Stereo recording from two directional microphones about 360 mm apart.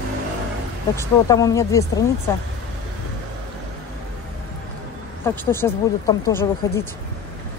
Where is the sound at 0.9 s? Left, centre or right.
Centre.